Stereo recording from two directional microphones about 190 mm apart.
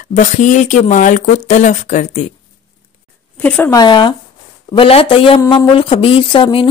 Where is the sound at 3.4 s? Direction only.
10° left (ahead or behind).